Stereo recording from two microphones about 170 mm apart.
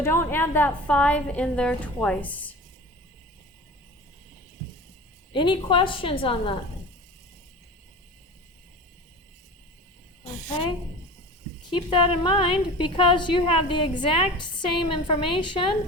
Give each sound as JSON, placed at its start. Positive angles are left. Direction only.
{"t": 0.0, "sound": "a woman's voice", "side_deg": 15}
{"t": 5.3, "sound": "a woman's voice", "side_deg": 30}
{"t": 11.7, "sound": "a woman's voice", "side_deg": 30}